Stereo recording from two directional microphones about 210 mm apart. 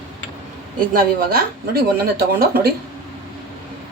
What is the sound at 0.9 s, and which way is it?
Speech, 45° right (ahead or behind).